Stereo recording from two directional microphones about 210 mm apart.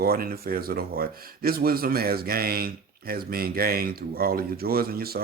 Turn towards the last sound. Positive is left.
turn(degrees=-45)  # may be behind; listen again after turning